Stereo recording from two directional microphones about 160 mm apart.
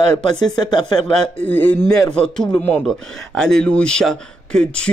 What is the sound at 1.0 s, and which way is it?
A man's voice, 5° left (ahead or behind).